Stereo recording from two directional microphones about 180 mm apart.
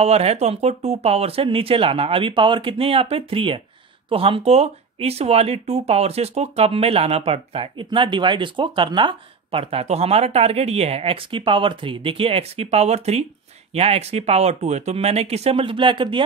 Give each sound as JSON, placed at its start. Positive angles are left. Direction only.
{"t": 0.0, "sound": "speech", "side_deg": -35}